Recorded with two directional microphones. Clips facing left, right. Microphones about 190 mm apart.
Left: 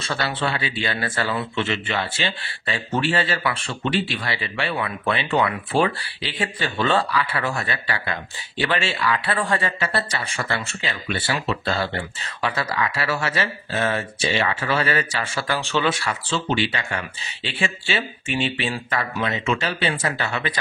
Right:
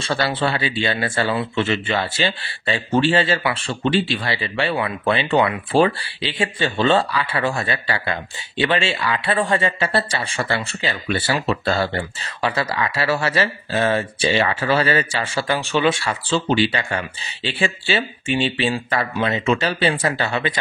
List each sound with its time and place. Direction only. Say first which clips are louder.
0.0 s speech: right 4 dB; 35° right (ahead or behind)
1.5 s speech: right 4 dB; 40° right (ahead or behind); by 15.9 s 15° right (ahead or behind)
15.9 s speech: right 4 dB; 30° right (ahead or behind)